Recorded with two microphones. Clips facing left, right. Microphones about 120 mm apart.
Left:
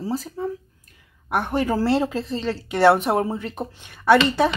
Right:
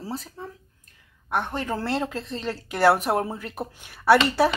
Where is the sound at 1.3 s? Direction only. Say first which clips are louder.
Left 5 dB; 10° left (ahead or behind).